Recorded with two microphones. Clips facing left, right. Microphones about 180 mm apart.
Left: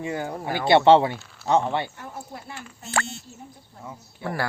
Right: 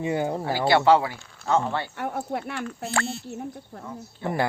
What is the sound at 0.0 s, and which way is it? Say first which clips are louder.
Speech: right 4 dB; 20° right (ahead or behind).